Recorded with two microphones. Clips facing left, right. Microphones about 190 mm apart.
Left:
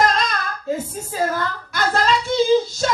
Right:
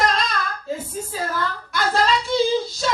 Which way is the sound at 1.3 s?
45° left (ahead or behind).